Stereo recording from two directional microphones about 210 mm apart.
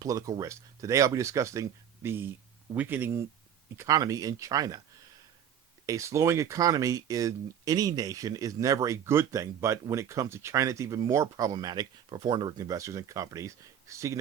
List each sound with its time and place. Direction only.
0.0 s speech: 15° right (ahead or behind)
5.8 s speech: 15° right (ahead or behind)